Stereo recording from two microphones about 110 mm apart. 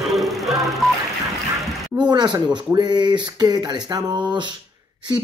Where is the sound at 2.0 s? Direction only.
40° right (ahead or behind).